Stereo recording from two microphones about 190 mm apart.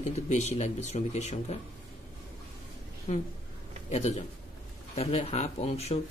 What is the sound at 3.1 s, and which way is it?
Speech, 40° left (ahead or behind).